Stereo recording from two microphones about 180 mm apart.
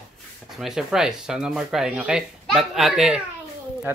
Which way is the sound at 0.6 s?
Centre (ahead or behind).